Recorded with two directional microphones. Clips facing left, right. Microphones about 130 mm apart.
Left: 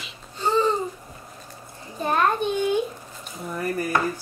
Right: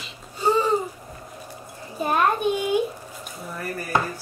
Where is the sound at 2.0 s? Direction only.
10° right (ahead or behind).